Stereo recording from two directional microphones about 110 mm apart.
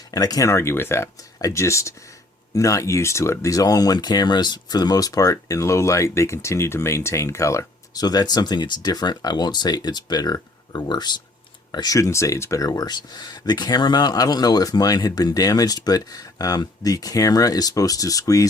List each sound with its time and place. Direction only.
0.1 s speech: 35° left (ahead or behind)